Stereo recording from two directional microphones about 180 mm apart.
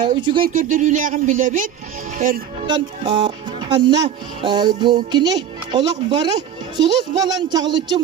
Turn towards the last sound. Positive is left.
turn(degrees=-25)  # may be behind; listen again after turning